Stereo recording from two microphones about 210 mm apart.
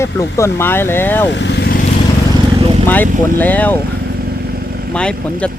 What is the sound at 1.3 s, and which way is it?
Vehicle, 55° left (ahead or behind).